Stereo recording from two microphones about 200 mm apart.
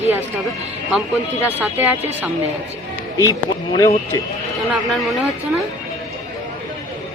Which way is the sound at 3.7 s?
15° left (ahead or behind).